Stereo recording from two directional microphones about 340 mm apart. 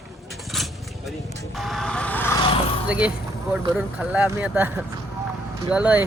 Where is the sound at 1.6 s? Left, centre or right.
Centre.